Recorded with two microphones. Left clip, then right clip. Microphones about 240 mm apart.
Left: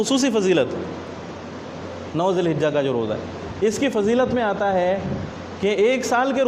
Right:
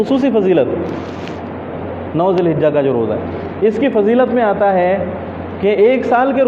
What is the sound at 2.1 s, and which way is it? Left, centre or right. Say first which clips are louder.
A man's voice: right 7 dB; left.